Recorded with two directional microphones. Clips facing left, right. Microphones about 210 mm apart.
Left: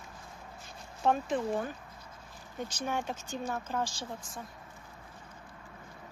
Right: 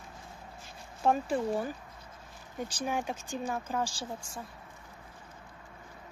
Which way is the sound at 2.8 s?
10° right (ahead or behind).